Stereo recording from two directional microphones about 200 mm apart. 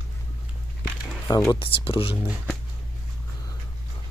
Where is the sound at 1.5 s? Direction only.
25° left (ahead or behind).